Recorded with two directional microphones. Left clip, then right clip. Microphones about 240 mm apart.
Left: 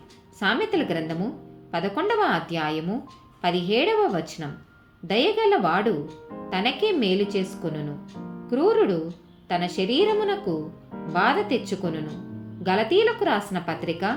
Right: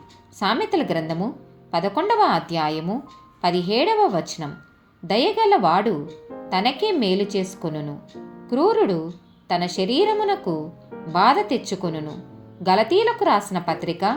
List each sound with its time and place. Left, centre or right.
0.3 s a woman's voice: centre